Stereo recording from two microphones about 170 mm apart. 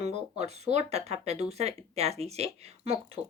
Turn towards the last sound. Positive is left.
turn(degrees=-35)  # may be behind; listen again after turning